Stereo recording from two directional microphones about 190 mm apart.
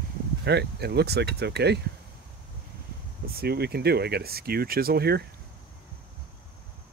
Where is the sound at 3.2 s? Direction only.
55° right (ahead or behind).